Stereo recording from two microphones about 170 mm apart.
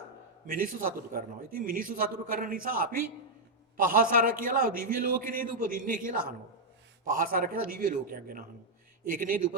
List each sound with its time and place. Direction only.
0.4 s a man's voice: 55° right (ahead or behind)